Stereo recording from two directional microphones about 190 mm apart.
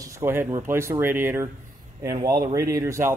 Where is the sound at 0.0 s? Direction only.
15° right (ahead or behind).